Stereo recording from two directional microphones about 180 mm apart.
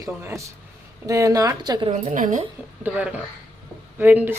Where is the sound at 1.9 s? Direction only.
45° right (ahead or behind).